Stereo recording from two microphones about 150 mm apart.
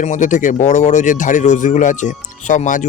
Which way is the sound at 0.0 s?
55° left (ahead or behind).